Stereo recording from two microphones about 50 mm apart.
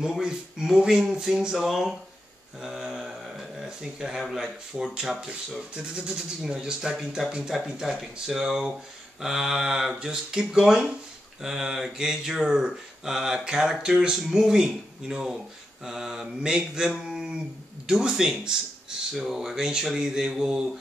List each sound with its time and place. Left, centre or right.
0.0 s speech: centre
2.6 s a sound: centre
4.2 s speech: centre